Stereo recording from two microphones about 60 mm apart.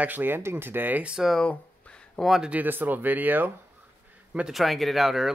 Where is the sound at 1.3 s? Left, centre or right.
Centre.